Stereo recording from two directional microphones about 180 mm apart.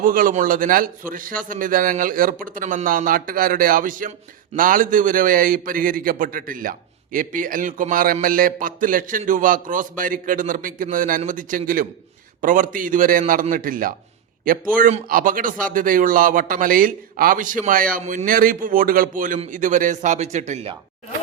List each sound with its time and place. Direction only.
0.0 s a man's voice: 50° right (ahead or behind)